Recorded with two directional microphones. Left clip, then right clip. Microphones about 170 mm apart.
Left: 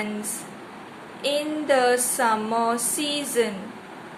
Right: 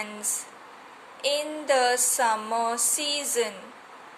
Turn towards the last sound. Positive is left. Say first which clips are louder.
# left 3 dB
turn(degrees=-35)  # may be behind; listen again after turning